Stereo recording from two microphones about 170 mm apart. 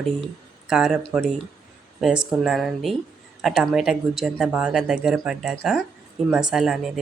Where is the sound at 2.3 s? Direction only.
Centre (ahead or behind).